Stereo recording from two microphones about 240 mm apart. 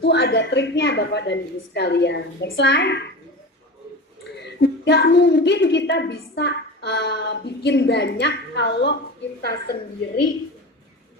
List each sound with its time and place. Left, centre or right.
0.0 s a woman's voice: left
4.4 s a woman's voice: left